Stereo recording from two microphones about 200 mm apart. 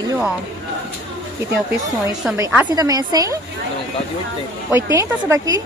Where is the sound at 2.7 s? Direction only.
20° right (ahead or behind).